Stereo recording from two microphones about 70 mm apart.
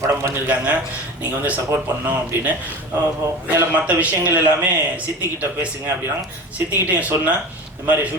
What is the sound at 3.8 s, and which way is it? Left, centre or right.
A man's voice, right.